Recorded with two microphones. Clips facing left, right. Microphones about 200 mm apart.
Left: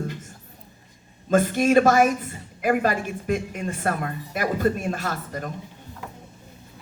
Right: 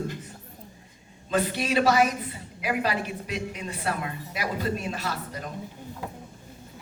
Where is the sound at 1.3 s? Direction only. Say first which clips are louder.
Left 7 dB; 45° left (ahead or behind).